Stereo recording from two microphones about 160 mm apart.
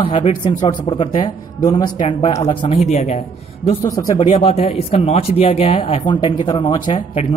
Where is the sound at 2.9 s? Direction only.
45° left (ahead or behind).